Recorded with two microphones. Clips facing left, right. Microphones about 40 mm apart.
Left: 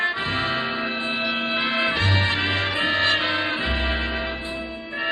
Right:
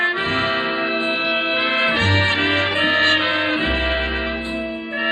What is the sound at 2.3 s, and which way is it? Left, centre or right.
Music, centre.